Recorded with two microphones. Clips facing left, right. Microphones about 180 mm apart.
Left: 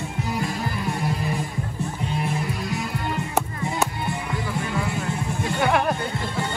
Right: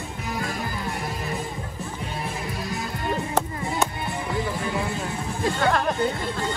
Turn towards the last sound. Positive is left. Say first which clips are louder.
# left 1 dB
turn(degrees=10)  # may be behind; listen again after turning